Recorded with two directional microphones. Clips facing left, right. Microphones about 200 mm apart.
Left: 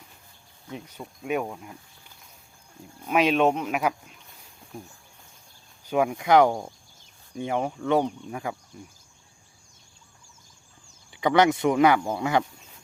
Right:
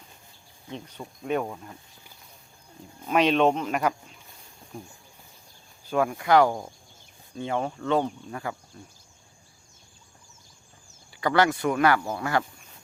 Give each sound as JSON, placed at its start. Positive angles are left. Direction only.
{"t": 0.9, "sound": "speech", "side_deg": 5}
{"t": 3.1, "sound": "speech", "side_deg": 5}
{"t": 5.8, "sound": "speech", "side_deg": 15}
{"t": 11.2, "sound": "speech", "side_deg": 20}